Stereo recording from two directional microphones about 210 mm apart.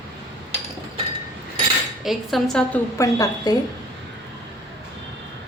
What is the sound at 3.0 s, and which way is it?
Speech, 15° left (ahead or behind).